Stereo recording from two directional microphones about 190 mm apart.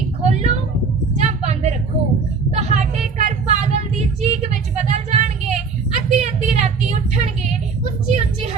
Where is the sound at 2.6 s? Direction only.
40° right (ahead or behind).